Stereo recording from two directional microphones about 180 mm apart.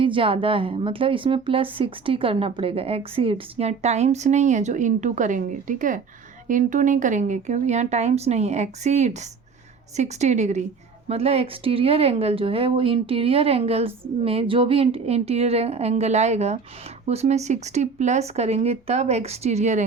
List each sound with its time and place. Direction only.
0.0 s speech: 30° right (ahead or behind)